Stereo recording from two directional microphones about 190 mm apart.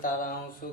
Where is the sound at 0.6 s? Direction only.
50° left (ahead or behind).